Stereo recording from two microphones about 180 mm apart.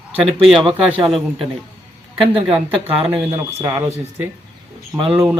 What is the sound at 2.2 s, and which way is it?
Speech, 30° right (ahead or behind).